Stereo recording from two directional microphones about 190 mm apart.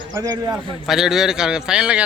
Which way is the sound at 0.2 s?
20° right (ahead or behind).